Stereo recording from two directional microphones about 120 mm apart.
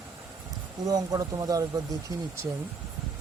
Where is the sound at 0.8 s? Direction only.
30° right (ahead or behind).